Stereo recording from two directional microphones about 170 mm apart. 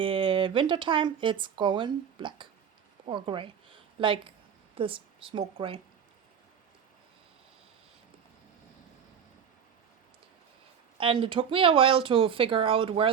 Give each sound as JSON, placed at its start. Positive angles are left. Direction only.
{"t": 0.0, "sound": "a woman's voice", "side_deg": -30}
{"t": 10.9, "sound": "speech", "side_deg": -30}